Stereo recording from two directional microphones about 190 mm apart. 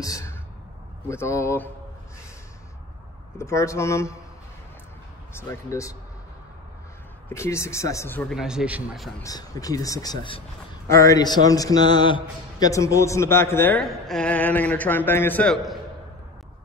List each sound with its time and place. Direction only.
0.0 s sigh: 15° left (ahead or behind)
1.0 s a man's voice: 15° left (ahead or behind)
3.3 s a man's voice: 15° left (ahead or behind)
5.3 s a man's voice: 15° left (ahead or behind)
7.2 s a man's voice: 15° left (ahead or behind)
8.4 s a man's voice: 5° right (ahead or behind)
9.2 s a man's voice: 20° left (ahead or behind); by 15.8 s centre (ahead or behind)